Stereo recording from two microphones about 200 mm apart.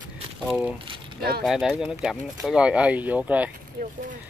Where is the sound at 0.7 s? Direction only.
25° right (ahead or behind).